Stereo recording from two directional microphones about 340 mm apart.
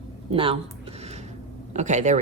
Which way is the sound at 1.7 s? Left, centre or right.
Right.